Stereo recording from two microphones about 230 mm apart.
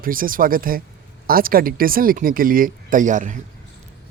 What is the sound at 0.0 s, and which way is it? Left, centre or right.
Speech, right.